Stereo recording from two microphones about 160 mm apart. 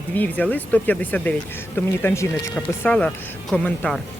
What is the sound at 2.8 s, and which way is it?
Speech, 5° left (ahead or behind).